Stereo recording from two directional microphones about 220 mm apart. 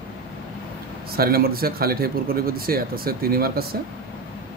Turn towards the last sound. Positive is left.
turn(degrees=-45)  # may be behind; listen again after turning